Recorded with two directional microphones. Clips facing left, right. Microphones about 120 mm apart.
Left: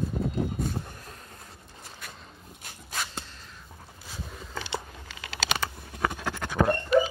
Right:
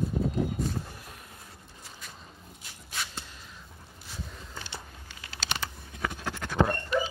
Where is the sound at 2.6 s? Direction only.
45° left (ahead or behind).